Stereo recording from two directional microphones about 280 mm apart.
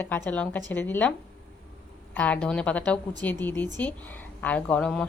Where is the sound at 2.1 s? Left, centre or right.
Centre.